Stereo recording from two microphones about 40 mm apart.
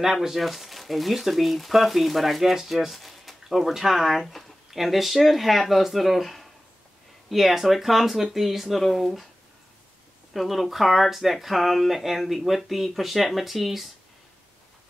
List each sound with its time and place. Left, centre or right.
0.0 s speech: centre
10.3 s speech: centre